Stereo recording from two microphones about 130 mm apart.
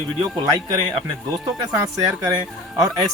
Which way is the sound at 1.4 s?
25° right (ahead or behind).